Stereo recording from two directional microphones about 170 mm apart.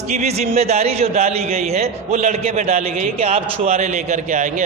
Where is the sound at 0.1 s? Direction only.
40° right (ahead or behind).